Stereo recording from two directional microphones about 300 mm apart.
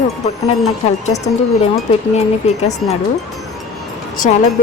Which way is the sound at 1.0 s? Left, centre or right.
Left.